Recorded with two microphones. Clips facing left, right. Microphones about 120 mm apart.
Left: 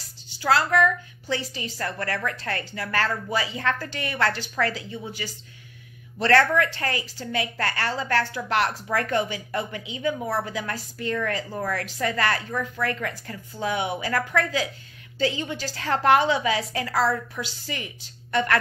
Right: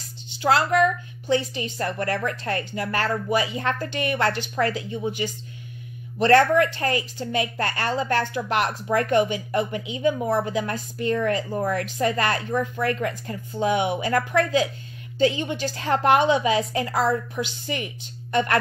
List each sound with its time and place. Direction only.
0.3 s a woman's voice: 20° right (ahead or behind)